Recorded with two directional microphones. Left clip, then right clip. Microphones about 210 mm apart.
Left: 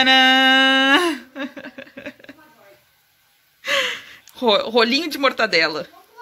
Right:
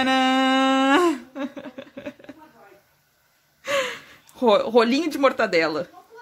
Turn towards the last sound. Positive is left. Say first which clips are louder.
# left 3 dB
turn(degrees=-5)  # may be behind; listen again after turning